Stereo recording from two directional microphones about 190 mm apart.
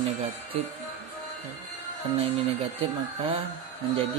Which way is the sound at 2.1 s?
30° right (ahead or behind).